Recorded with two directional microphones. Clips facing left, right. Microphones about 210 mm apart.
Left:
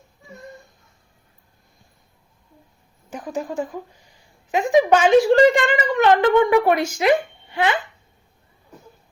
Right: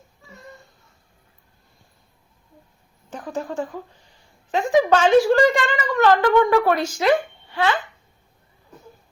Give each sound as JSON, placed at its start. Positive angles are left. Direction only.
{"t": 3.1, "sound": "speech", "side_deg": 10}